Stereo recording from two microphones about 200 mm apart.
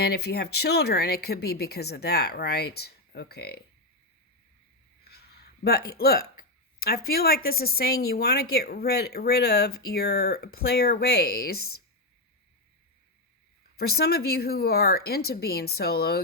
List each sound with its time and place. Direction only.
0.0 s speech: 55° left (ahead or behind)
5.0 s hiccup: 55° left (ahead or behind)
6.7 s speech: 50° left (ahead or behind)
13.7 s speech: 50° left (ahead or behind)